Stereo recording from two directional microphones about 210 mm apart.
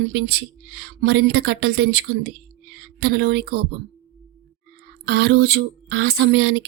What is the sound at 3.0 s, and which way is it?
Speech, 50° right (ahead or behind).